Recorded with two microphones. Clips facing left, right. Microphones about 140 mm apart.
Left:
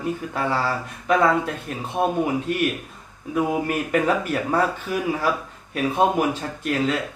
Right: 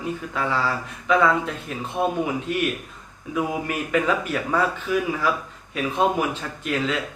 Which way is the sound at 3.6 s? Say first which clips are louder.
Left 2 dB; 45° left (ahead or behind).